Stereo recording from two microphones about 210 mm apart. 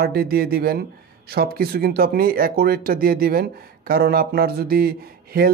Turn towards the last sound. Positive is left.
turn(degrees=-45)  # may be behind; listen again after turning